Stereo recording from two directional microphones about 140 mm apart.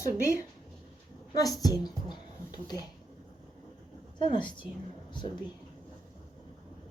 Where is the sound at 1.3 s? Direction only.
25° left (ahead or behind).